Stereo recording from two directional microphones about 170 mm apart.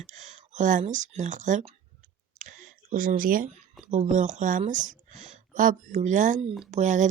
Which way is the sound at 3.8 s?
40° right (ahead or behind).